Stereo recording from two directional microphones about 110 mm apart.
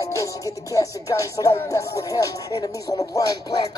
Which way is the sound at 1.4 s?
40° left (ahead or behind).